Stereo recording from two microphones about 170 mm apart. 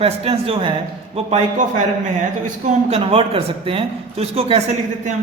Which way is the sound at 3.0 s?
35° right (ahead or behind).